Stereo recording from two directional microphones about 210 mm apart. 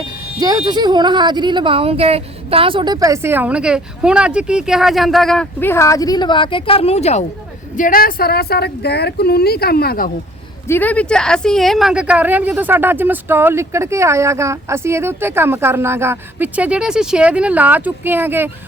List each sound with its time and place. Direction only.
0.3 s speech: 20° right (ahead or behind); by 7.3 s 30° left (ahead or behind)
7.8 s speech: 40° left (ahead or behind)
10.7 s speech: 10° left (ahead or behind); by 18.5 s 10° right (ahead or behind)